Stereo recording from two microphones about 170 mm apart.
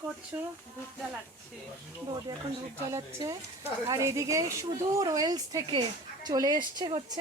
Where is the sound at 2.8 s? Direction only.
20° right (ahead or behind).